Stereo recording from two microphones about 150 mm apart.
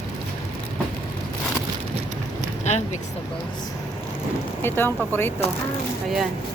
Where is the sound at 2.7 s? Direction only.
50° left (ahead or behind).